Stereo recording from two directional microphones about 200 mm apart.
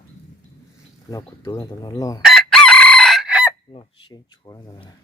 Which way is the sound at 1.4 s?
20° left (ahead or behind).